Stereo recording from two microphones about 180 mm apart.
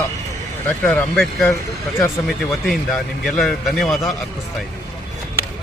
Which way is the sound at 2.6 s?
Centre (ahead or behind).